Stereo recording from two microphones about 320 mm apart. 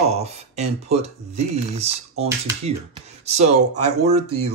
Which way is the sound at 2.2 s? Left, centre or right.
Centre.